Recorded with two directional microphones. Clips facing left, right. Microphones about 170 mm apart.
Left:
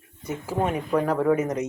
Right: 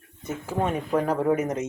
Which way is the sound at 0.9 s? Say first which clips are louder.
Left 2 dB; 20° right (ahead or behind).